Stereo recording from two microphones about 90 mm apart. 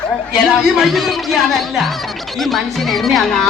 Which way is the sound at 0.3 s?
5° right (ahead or behind).